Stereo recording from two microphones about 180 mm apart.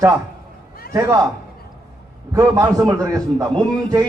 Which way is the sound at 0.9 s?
15° right (ahead or behind).